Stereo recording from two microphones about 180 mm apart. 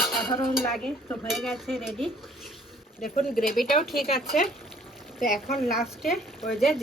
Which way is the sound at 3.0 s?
50° left (ahead or behind).